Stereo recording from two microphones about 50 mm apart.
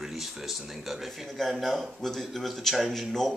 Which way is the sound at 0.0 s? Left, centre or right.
Centre.